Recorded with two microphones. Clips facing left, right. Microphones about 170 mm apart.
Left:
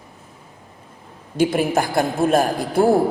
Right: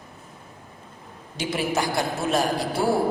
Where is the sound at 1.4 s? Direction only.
50° left (ahead or behind).